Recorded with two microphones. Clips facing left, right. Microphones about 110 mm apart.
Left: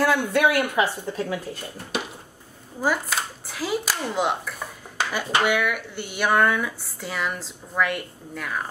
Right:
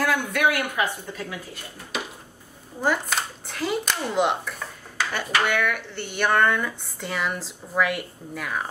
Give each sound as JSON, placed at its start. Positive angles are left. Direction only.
{"t": 0.0, "sound": "speech", "side_deg": 30}
{"t": 2.8, "sound": "speech", "side_deg": 5}
{"t": 4.6, "sound": "dishes", "side_deg": 10}
{"t": 5.4, "sound": "speech", "side_deg": 10}